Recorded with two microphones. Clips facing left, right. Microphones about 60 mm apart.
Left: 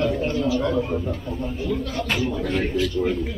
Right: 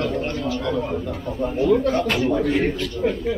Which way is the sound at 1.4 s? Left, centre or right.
Right.